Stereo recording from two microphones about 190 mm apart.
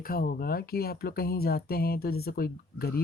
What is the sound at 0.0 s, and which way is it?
Speech, 50° left (ahead or behind).